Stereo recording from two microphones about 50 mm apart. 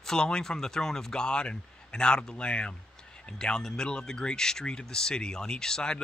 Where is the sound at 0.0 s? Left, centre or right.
Centre.